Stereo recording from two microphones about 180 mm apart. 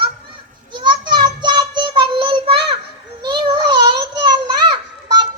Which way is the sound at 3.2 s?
25° right (ahead or behind).